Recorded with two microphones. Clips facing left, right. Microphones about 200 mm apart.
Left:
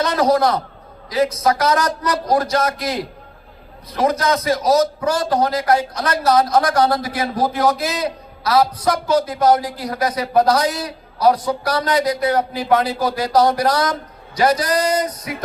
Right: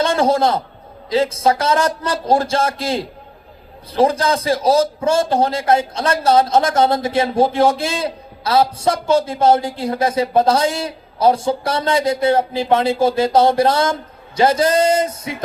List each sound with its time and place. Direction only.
0.0 s a man's voice: 25° right (ahead or behind)